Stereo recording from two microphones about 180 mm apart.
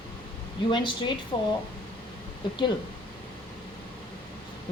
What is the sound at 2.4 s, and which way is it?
Speech, 25° left (ahead or behind).